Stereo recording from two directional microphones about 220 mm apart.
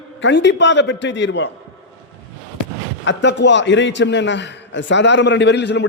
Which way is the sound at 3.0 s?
55° left (ahead or behind).